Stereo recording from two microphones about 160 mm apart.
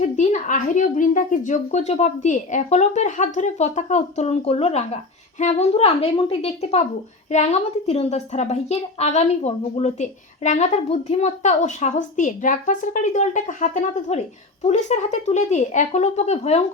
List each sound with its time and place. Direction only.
0.0 s a woman's voice: 50° left (ahead or behind)